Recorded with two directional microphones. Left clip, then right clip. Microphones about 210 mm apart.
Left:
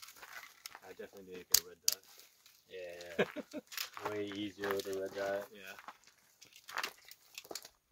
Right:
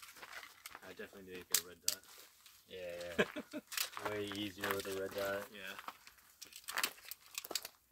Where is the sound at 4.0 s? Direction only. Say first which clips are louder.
Left 4 dB; 30° left (ahead or behind).